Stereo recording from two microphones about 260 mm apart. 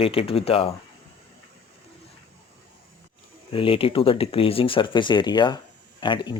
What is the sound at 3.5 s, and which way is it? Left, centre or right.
Speech, left.